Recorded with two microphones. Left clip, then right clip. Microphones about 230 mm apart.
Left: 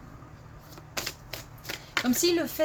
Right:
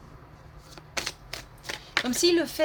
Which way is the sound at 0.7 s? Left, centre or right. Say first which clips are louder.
Right 2 dB; centre.